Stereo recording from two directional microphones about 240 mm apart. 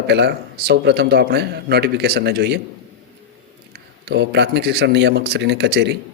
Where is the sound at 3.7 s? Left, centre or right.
Right.